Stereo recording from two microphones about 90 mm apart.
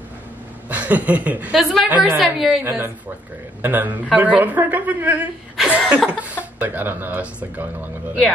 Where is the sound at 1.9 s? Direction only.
20° right (ahead or behind).